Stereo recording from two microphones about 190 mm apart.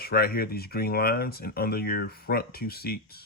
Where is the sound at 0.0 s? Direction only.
55° left (ahead or behind).